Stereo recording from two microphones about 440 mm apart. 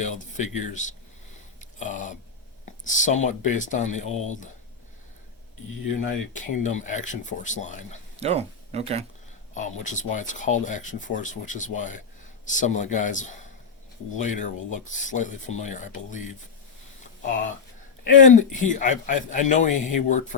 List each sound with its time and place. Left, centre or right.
0.0 s speech: centre
6.3 s speech: centre
8.1 s speech: centre
9.6 s speech: centre
18.3 s speech: centre